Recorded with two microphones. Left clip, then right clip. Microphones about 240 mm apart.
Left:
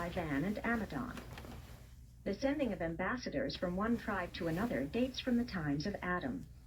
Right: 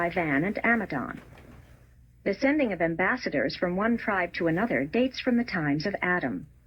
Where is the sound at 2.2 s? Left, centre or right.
Right.